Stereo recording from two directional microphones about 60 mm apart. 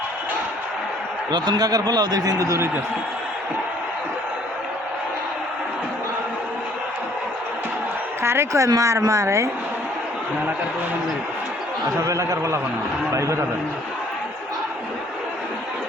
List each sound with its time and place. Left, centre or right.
1.5 s a man's voice: right
8.2 s speech: right
11.9 s speech: right